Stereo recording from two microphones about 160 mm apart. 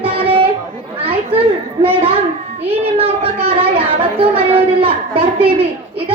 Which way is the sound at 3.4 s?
35° right (ahead or behind).